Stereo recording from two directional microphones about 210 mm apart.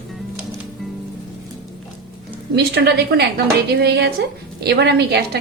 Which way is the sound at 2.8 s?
50° right (ahead or behind).